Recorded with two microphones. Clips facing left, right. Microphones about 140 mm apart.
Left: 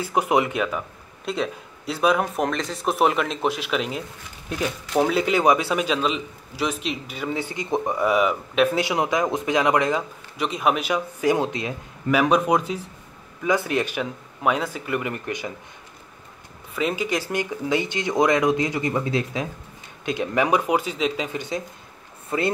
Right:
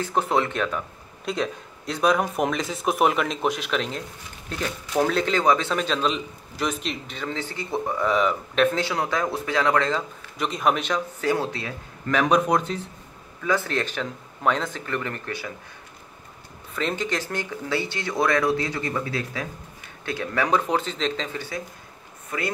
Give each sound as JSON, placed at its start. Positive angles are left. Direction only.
{"t": 0.0, "sound": "speech", "side_deg": 10}
{"t": 10.3, "sound": "speech", "side_deg": 0}
{"t": 16.7, "sound": "speech", "side_deg": 5}